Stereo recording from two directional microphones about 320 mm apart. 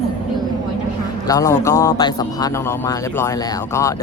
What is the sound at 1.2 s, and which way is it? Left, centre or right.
Speech, centre.